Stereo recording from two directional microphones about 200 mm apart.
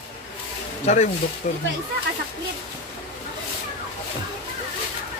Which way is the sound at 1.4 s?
40° left (ahead or behind).